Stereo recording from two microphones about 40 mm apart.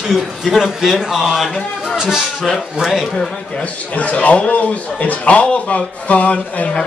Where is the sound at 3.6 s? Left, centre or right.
Left.